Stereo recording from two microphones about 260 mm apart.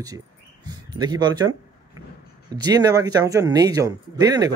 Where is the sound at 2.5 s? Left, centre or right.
Centre.